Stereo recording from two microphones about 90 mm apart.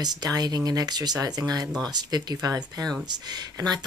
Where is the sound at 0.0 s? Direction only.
45° right (ahead or behind).